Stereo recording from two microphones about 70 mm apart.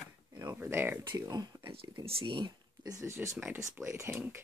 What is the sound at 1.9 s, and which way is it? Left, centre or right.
Speech, right.